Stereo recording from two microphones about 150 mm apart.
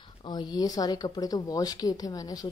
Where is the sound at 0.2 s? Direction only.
30° left (ahead or behind).